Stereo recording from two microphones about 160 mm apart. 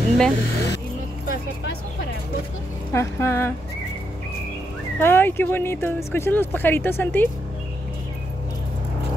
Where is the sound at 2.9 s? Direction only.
15° left (ahead or behind).